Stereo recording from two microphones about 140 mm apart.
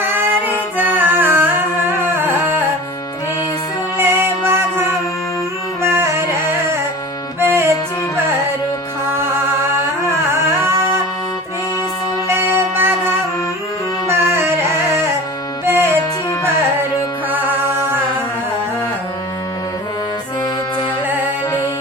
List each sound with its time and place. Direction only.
0.0 s music: 15° right (ahead or behind)
3.9 s music: 15° right (ahead or behind)
10.3 s a sound: 20° right (ahead or behind)
12.3 s music: 15° right (ahead or behind)